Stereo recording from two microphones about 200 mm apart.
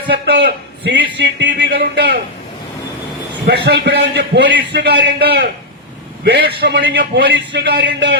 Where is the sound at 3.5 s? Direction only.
55° right (ahead or behind).